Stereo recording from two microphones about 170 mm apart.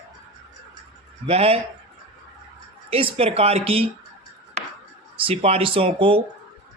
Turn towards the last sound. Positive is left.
turn(degrees=-30)  # may be behind; listen again after turning